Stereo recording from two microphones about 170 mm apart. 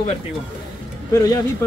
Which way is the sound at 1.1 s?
20° left (ahead or behind).